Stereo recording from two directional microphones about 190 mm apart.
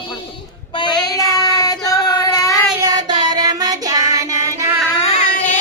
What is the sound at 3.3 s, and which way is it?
Music, 20° right (ahead or behind).